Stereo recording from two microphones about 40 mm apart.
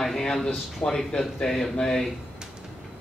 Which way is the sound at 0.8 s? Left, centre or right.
Left.